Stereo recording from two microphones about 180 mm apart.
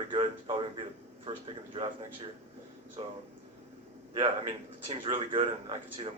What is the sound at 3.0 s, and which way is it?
Speech, 35° right (ahead or behind).